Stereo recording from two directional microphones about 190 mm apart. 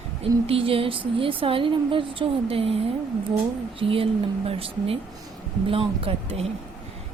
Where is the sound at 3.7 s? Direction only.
30° right (ahead or behind).